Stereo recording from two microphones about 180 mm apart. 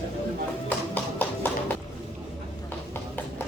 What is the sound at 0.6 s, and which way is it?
Music, 10° left (ahead or behind).